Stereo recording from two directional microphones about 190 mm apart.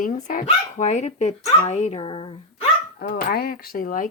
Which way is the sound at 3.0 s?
45° left (ahead or behind).